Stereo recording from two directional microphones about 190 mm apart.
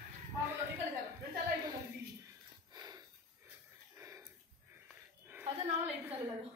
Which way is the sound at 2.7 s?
20° right (ahead or behind).